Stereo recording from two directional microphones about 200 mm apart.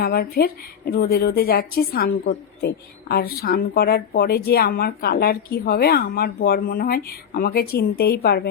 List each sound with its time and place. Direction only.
0.0 s a woman's voice: 50° left (ahead or behind)